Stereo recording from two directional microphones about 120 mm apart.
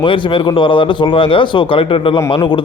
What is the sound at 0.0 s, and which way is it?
Speech, 45° left (ahead or behind).